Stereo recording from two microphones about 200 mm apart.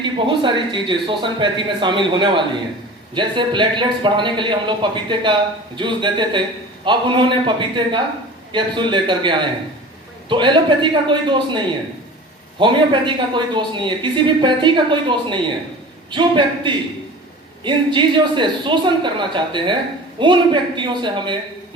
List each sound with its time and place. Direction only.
0.0 s a man's voice: 25° right (ahead or behind)